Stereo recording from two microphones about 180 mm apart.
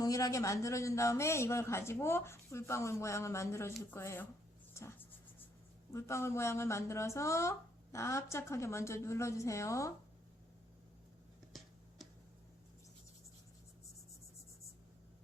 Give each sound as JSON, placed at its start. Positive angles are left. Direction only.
{"t": 0.0, "sound": "a man's voice", "side_deg": 20}
{"t": 4.7, "sound": "writing", "side_deg": 15}
{"t": 5.9, "sound": "a man's voice", "side_deg": 15}